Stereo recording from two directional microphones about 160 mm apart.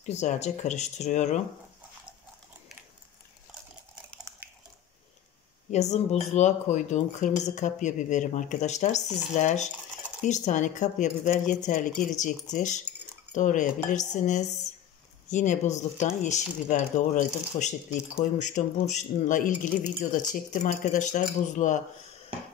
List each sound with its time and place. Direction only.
0.0 s speech: 45° left (ahead or behind)
5.7 s speech: 45° left (ahead or behind)